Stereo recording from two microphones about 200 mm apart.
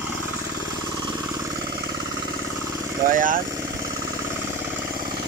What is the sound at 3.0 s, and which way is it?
Speech, 45° right (ahead or behind).